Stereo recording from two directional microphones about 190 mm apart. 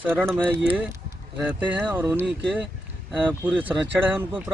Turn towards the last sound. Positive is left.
turn(degrees=-10)  # may be behind; listen again after turning